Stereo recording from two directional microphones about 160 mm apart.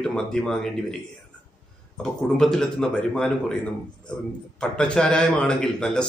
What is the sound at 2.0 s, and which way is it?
A man's voice, 5° left (ahead or behind).